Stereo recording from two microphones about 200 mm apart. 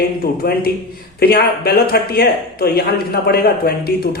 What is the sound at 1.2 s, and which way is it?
Speech, 50° left (ahead or behind).